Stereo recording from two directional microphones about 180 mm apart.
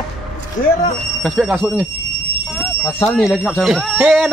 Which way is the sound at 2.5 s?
Centre (ahead or behind).